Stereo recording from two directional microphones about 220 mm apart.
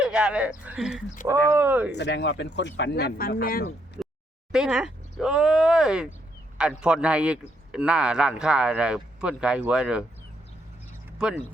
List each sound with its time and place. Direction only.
0.0 s speech: 5° right (ahead or behind)
1.9 s speech: 50° left (ahead or behind)
4.5 s speech: 5° right (ahead or behind)
11.2 s speech: 5° right (ahead or behind)